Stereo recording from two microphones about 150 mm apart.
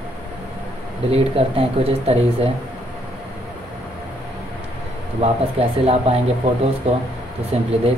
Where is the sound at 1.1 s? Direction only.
40° right (ahead or behind).